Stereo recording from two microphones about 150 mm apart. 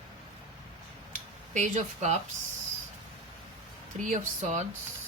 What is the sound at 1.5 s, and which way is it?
Speech, 55° right (ahead or behind).